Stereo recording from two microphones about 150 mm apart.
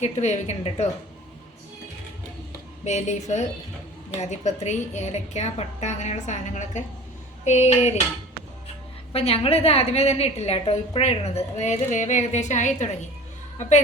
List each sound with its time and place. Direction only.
0.0 s a woman's voice: 50° left (ahead or behind)
2.8 s a woman's voice: 50° left (ahead or behind)
9.1 s a woman's voice: 40° left (ahead or behind)